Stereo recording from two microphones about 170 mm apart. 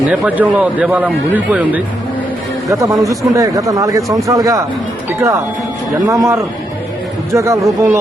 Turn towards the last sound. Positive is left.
turn(degrees=-15)  # may be behind; listen again after turning